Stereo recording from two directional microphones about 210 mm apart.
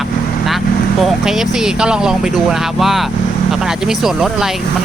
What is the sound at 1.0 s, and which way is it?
Speech, centre (ahead or behind).